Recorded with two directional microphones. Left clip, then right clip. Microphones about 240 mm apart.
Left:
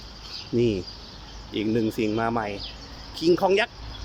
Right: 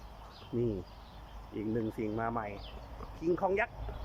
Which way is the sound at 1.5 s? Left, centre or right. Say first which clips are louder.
Left 11 dB; centre.